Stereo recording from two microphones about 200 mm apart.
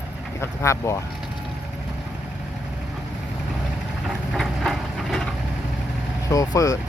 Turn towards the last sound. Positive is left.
turn(degrees=15)  # may be behind; listen again after turning